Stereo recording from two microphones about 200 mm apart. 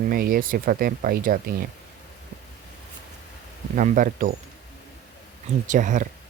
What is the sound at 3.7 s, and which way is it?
Speech, 40° right (ahead or behind).